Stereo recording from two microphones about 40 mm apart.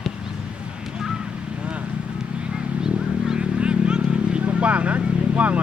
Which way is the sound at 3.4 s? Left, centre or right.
Right.